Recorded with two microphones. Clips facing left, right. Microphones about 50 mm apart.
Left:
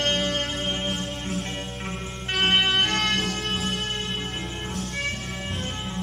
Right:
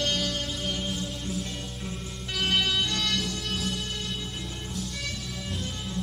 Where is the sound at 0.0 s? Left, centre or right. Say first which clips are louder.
Left 4 dB; left.